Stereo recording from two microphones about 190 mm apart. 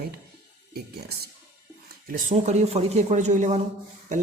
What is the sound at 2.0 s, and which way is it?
Speech, 35° right (ahead or behind).